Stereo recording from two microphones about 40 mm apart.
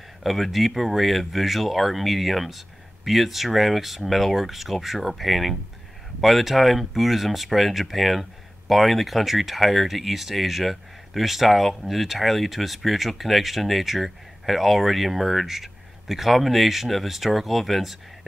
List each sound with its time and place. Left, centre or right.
0.2 s speech: centre